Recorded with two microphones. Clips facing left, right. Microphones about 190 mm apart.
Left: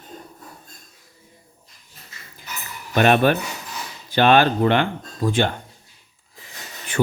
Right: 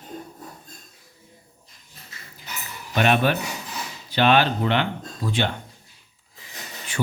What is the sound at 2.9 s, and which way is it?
Speech, 50° left (ahead or behind).